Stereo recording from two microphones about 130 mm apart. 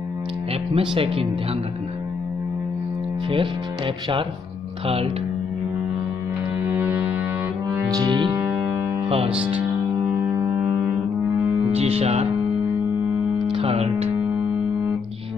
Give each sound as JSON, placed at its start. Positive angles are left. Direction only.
{"t": 0.7, "sound": "speech", "side_deg": -45}
{"t": 3.3, "sound": "speech", "side_deg": -40}
{"t": 6.6, "sound": "music", "side_deg": -15}
{"t": 7.9, "sound": "music", "side_deg": -30}
{"t": 8.4, "sound": "music", "side_deg": -20}
{"t": 10.1, "sound": "music", "side_deg": -25}
{"t": 11.7, "sound": "speech", "side_deg": -50}
{"t": 13.5, "sound": "speech", "side_deg": -45}